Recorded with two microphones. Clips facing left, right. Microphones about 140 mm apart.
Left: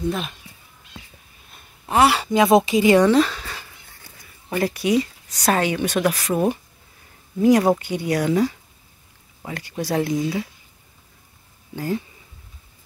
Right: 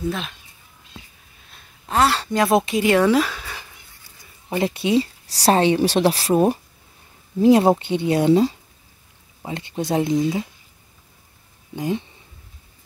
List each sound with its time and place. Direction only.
0.0 s speech: 5° left (ahead or behind)
1.9 s speech: 5° left (ahead or behind); by 3.6 s 10° right (ahead or behind)
4.5 s speech: 25° right (ahead or behind)
11.7 s speech: 20° right (ahead or behind)